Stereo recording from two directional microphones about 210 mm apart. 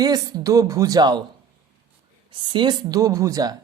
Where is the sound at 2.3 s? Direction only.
25° right (ahead or behind).